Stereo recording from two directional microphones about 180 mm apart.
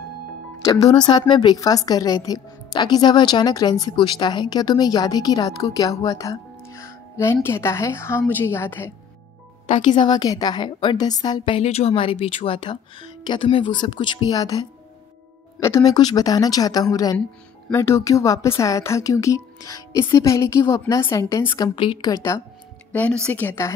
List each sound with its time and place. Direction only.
0.7 s a woman's voice: 25° left (ahead or behind)
9.7 s a woman's voice: 25° left (ahead or behind)
22.9 s speech: 5° left (ahead or behind)